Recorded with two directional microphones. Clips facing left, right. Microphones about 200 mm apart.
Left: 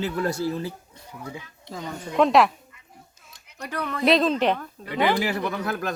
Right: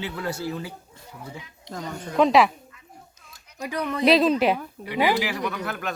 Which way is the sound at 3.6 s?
10° right (ahead or behind).